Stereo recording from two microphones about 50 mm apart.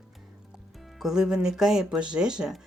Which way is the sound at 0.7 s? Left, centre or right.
Centre.